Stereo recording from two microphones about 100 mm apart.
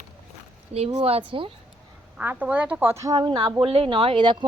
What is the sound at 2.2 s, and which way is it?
Speech, 15° right (ahead or behind).